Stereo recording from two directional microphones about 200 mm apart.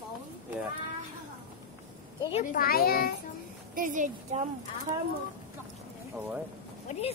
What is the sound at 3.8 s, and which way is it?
Speech, 40° right (ahead or behind).